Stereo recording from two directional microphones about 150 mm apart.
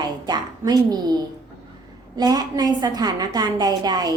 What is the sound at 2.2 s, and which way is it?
A woman's voice, 25° right (ahead or behind).